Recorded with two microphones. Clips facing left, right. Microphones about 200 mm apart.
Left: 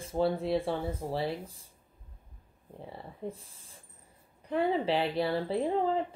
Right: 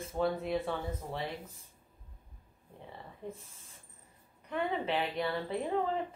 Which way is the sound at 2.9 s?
35° left (ahead or behind).